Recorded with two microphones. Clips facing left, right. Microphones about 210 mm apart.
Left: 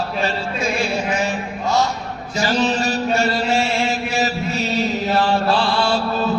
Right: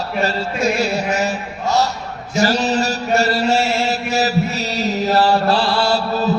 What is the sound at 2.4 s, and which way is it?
Mantra, 40° right (ahead or behind).